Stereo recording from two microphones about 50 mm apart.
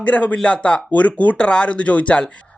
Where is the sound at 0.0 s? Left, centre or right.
Left.